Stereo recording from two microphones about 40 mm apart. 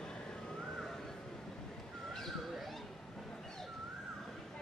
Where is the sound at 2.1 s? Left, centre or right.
Centre.